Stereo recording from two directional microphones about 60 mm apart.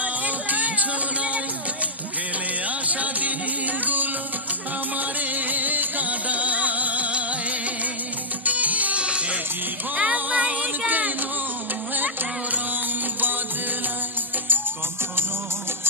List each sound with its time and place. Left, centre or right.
0.0 s music: right
2.9 s music: right
8.5 s music: right
9.9 s child singing: right
10.9 s a sound: right